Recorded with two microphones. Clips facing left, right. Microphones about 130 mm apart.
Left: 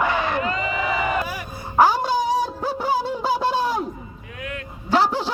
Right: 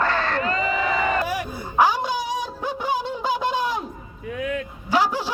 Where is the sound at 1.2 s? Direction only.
90° right.